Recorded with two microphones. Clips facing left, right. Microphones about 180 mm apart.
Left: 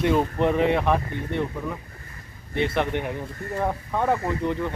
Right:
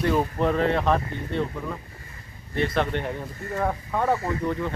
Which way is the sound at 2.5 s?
15° left (ahead or behind).